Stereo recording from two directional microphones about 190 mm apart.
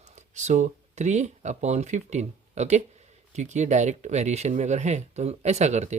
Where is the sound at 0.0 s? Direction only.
35° right (ahead or behind).